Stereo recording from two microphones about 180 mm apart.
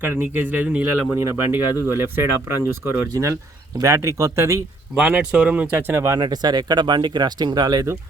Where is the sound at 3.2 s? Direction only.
15° right (ahead or behind).